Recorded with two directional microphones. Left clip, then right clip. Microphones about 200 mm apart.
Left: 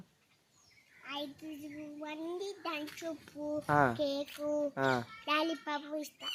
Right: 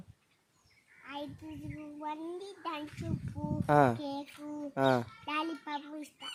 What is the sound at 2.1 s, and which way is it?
Speech, 15° right (ahead or behind).